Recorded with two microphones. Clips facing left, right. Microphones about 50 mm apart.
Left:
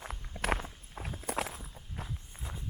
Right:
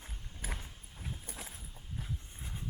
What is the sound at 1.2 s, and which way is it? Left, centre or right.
Walk, left.